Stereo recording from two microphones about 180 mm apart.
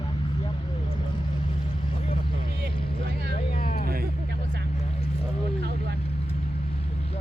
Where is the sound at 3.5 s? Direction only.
50° left (ahead or behind).